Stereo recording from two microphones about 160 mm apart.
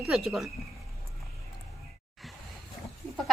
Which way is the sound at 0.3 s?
Centre (ahead or behind).